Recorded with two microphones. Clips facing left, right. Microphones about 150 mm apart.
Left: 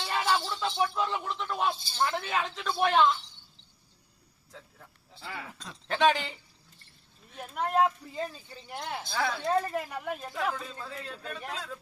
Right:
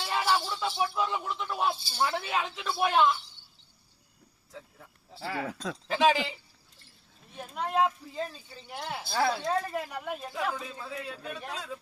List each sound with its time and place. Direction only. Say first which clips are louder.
0.0 s speech: even; 10° right (ahead or behind)
5.9 s speech: even; 5° right (ahead or behind)
7.3 s speech: left 1 dB; centre (ahead or behind)
9.0 s a woman's voice: right 5 dB; 35° right (ahead or behind)
9.4 s speech: left 2 dB; 5° left (ahead or behind)